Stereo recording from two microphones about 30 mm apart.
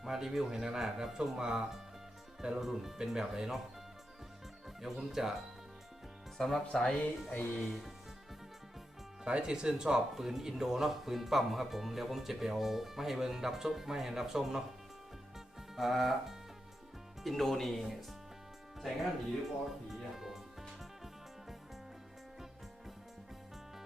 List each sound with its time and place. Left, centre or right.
0.0 s a man's voice: centre
2.6 s speech: centre
4.8 s speech: centre
6.3 s speech: centre
7.3 s speech: left
7.7 s speech: centre
9.2 s speech: right
15.7 s music: centre
17.2 s speech: centre
19.9 s music: centre